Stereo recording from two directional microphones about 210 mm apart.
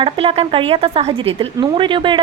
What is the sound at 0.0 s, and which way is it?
Speech, 25° right (ahead or behind).